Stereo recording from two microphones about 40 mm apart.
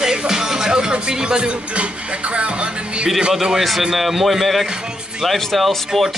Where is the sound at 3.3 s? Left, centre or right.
Centre.